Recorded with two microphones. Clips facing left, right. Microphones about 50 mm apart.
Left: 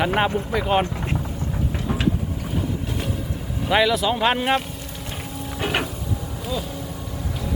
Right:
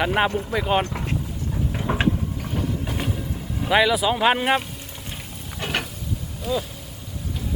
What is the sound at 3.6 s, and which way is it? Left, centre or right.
Speech, centre.